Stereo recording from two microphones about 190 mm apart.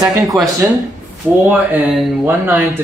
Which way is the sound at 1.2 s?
10° right (ahead or behind).